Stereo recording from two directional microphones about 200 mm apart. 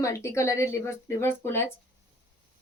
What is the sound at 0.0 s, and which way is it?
A woman's voice, 15° left (ahead or behind).